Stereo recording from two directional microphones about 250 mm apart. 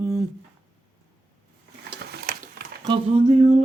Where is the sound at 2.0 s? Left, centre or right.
Right.